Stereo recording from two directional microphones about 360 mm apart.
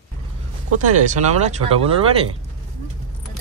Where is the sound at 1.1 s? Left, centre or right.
Centre.